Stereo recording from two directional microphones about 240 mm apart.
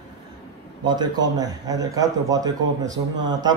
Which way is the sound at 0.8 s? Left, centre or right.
Centre.